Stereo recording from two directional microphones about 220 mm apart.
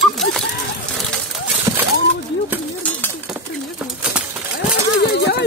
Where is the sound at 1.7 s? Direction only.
15° right (ahead or behind).